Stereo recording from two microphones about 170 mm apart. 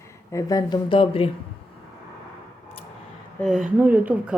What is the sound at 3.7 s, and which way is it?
Speech, 10° right (ahead or behind).